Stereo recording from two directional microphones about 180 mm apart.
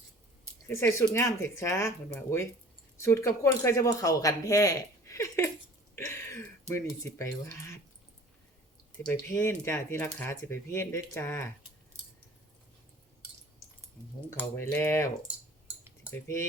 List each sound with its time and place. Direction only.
0.7 s speech: 15° left (ahead or behind)
9.0 s speech: 15° left (ahead or behind)
14.3 s speech: 10° left (ahead or behind)